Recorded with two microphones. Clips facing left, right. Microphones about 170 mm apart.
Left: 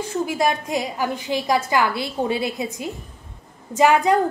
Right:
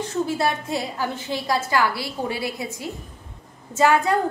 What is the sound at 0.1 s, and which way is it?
A woman's voice, 15° left (ahead or behind).